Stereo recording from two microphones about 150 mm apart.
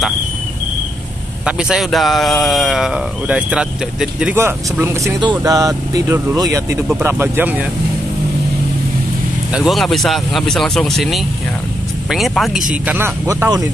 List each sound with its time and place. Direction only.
1.4 s speech: 5° right (ahead or behind)
4.4 s speech: 15° right (ahead or behind)
9.5 s speech: centre (ahead or behind)
12.8 s speech: 15° right (ahead or behind)